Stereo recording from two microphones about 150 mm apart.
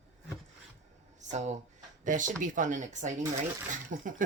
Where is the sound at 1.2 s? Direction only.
50° right (ahead or behind).